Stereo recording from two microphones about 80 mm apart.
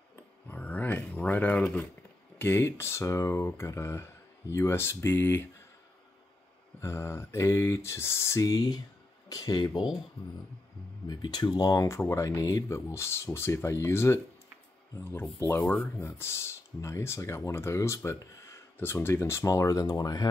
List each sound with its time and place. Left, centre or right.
0.5 s a sound: left
2.3 s speech: left
6.8 s speech: left
11.1 s speech: left
12.0 s speech: left
15.8 s speech: left
18.8 s speech: left